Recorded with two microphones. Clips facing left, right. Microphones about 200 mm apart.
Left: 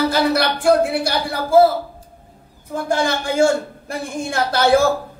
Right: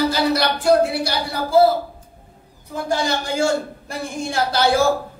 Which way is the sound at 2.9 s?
55° left (ahead or behind).